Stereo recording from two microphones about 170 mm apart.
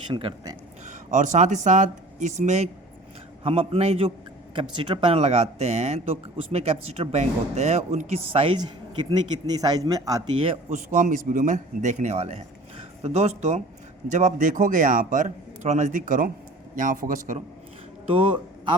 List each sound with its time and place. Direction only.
0.1 s speech: 30° right (ahead or behind)
0.9 s speech: 45° right (ahead or behind); by 10.4 s 20° right (ahead or behind)
10.7 s a man's voice: 50° right (ahead or behind)